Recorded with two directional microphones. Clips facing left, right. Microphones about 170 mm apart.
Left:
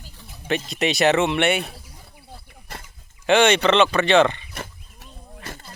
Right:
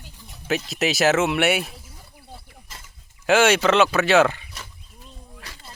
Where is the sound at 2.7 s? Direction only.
60° left (ahead or behind).